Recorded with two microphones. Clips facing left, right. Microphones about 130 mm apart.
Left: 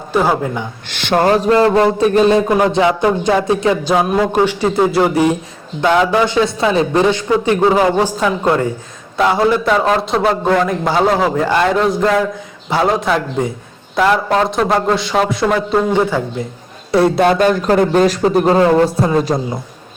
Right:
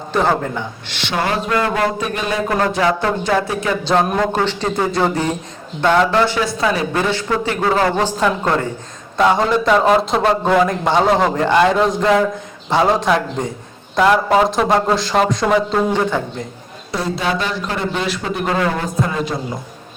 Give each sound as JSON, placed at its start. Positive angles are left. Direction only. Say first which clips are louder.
{"t": 0.1, "sound": "a man's voice", "louder": "left 2 dB", "side_deg": 5}
{"t": 0.9, "sound": "a man's voice", "louder": "left 8 dB", "side_deg": 50}
{"t": 2.5, "sound": "speech", "louder": "left 4 dB", "side_deg": 20}
{"t": 3.8, "sound": "a man's voice", "louder": "left 2 dB", "side_deg": 5}
{"t": 16.9, "sound": "a man's voice", "louder": "left 9 dB", "side_deg": 60}